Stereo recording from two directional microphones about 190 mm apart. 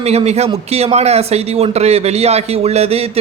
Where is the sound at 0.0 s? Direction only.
35° right (ahead or behind).